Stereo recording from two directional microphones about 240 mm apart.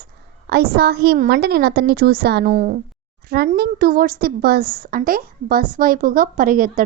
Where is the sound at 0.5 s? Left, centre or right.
Right.